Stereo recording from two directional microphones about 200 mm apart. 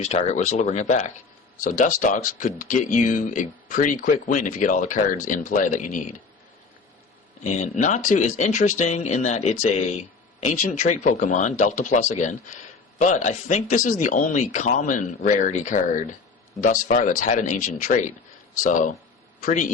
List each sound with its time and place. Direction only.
0.0 s speech: 35° left (ahead or behind)
7.4 s speech: 35° left (ahead or behind)